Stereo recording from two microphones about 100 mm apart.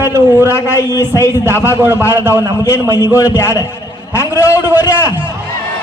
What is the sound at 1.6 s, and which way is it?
Speech, 20° right (ahead or behind).